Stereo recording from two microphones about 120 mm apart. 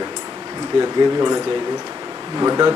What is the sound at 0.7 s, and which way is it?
Speech, 30° right (ahead or behind).